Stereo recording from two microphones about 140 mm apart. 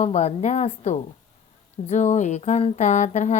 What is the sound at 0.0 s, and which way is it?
A woman's voice, 55° left (ahead or behind).